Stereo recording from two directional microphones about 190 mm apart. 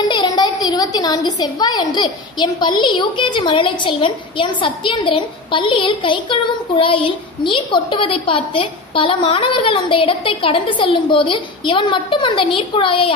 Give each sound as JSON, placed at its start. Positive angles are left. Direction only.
{"t": 0.1, "sound": "a woman's voice", "side_deg": 25}
{"t": 7.4, "sound": "a woman's voice", "side_deg": 25}